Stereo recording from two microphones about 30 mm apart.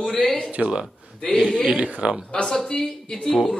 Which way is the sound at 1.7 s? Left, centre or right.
Right.